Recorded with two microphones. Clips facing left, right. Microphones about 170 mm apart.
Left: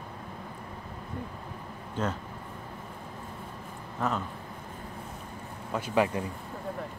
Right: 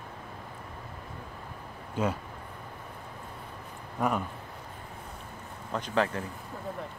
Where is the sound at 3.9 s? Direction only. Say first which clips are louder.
Right 2 dB; 10° right (ahead or behind).